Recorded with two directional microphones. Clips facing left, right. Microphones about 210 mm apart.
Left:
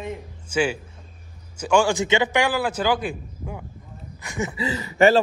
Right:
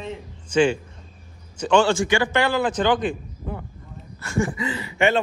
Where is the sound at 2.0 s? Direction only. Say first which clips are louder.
Even; 20° left (ahead or behind).